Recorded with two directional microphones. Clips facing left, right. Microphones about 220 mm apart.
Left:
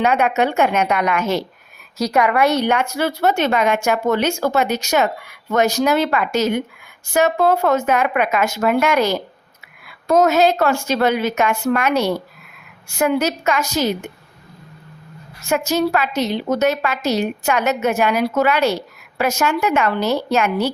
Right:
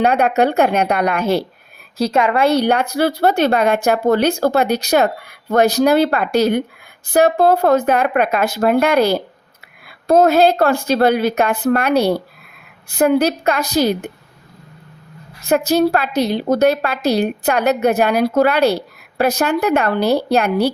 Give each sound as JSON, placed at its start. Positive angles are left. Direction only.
{"t": 0.0, "sound": "speech", "side_deg": -35}
{"t": 15.4, "sound": "speech", "side_deg": -35}